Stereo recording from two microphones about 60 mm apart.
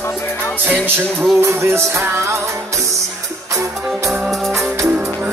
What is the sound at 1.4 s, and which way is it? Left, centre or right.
Music, right.